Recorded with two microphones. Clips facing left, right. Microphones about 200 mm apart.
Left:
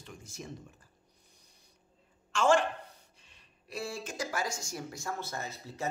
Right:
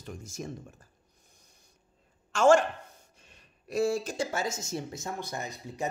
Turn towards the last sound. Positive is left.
turn(degrees=-15)  # may be behind; listen again after turning